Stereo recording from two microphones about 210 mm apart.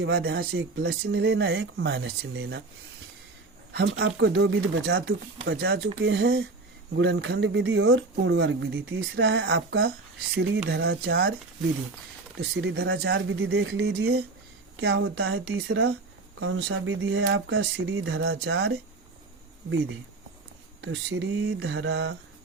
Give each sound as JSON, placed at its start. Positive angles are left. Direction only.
{"t": 0.0, "sound": "speech", "side_deg": -50}
{"t": 2.3, "sound": "speech", "side_deg": -70}
{"t": 3.7, "sound": "speech", "side_deg": -60}
{"t": 12.4, "sound": "speech", "side_deg": -50}
{"t": 20.8, "sound": "speech", "side_deg": -60}